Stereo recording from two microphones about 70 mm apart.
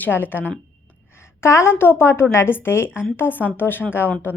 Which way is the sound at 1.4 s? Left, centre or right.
Left.